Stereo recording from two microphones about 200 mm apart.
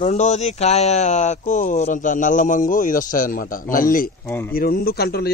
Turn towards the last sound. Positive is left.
turn(degrees=50)  # may be behind; listen again after turning